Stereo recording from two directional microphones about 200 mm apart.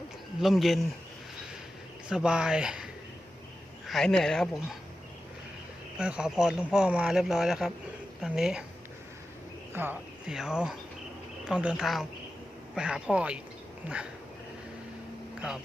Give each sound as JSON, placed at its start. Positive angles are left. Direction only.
{"t": 0.4, "sound": "speech", "side_deg": 0}
{"t": 2.0, "sound": "speech", "side_deg": -5}
{"t": 6.0, "sound": "speech", "side_deg": -5}
{"t": 9.7, "sound": "speech", "side_deg": -10}